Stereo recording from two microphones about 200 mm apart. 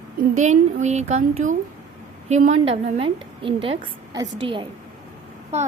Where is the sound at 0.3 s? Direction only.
35° right (ahead or behind).